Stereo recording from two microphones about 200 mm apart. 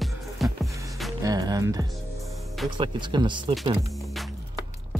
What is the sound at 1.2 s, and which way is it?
Speech, 20° right (ahead or behind).